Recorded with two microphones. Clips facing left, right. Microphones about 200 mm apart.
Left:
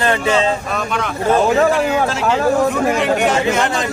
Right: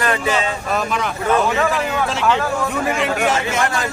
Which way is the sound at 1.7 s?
Centre (ahead or behind).